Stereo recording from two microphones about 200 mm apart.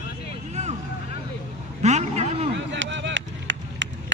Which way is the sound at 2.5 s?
65° right (ahead or behind).